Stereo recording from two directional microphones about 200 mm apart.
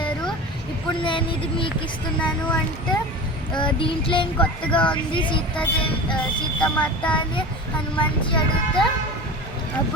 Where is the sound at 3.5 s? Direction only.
25° left (ahead or behind).